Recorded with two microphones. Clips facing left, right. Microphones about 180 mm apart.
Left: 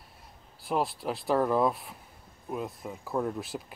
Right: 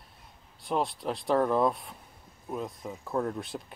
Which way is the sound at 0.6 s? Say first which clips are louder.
Even; 5° left (ahead or behind).